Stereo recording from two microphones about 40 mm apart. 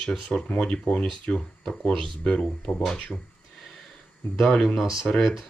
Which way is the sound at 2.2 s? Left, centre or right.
Left.